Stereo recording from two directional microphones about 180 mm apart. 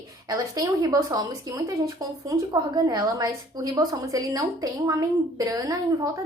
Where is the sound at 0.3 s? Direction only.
20° right (ahead or behind).